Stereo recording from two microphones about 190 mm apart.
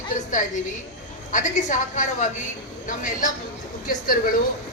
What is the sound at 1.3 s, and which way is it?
A woman's voice, 40° left (ahead or behind).